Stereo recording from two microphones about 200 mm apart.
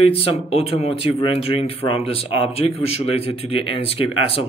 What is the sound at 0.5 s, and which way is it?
Speech, 30° left (ahead or behind).